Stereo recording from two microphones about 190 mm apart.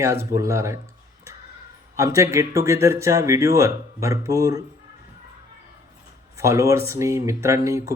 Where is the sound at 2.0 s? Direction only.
15° right (ahead or behind).